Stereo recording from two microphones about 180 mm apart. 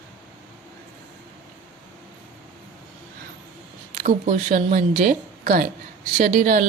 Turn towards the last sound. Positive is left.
turn(degrees=-50)  # may be behind; listen again after turning